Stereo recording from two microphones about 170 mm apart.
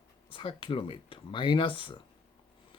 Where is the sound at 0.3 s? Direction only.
30° left (ahead or behind).